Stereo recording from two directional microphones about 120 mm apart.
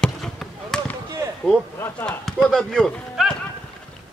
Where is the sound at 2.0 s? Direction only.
5° left (ahead or behind).